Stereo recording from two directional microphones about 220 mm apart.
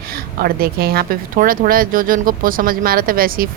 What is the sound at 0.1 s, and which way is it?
Speech, 45° right (ahead or behind).